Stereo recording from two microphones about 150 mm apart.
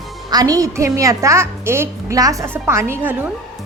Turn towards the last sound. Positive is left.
turn(degrees=-15)  # may be behind; listen again after turning